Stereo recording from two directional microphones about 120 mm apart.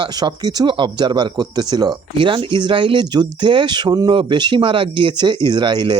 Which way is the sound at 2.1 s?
45° right (ahead or behind).